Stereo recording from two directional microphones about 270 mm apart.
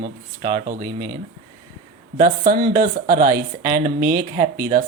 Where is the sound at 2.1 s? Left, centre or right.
Right.